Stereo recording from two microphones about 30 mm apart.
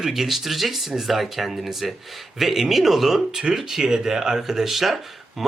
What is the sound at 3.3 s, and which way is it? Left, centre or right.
Speech, right.